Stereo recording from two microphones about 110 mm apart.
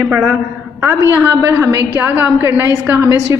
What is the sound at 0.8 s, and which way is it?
A woman's voice, 25° right (ahead or behind).